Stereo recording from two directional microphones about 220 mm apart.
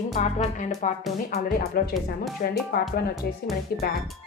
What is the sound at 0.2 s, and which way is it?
Speech, 30° left (ahead or behind).